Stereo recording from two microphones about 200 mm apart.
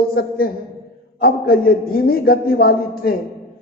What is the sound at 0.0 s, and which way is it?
A man's voice, 50° left (ahead or behind).